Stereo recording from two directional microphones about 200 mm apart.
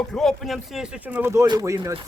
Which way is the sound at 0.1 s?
Centre (ahead or behind).